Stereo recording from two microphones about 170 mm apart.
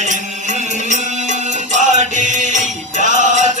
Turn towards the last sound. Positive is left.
turn(degrees=-45)  # may be behind; listen again after turning